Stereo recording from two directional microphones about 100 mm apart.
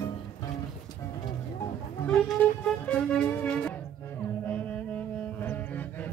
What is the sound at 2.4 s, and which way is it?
Music, 15° left (ahead or behind).